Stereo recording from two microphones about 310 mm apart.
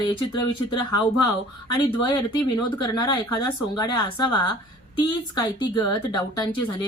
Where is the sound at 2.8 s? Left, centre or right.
Centre.